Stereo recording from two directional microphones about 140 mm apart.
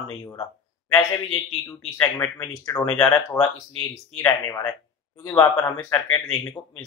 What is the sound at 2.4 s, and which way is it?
Speech, 25° left (ahead or behind).